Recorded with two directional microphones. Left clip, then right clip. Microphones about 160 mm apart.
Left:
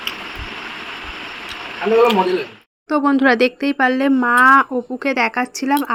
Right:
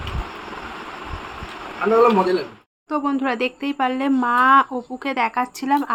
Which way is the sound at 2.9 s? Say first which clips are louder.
Left 7 dB; 40° left (ahead or behind).